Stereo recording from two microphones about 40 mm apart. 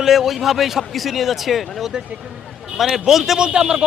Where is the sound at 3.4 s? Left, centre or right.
Right.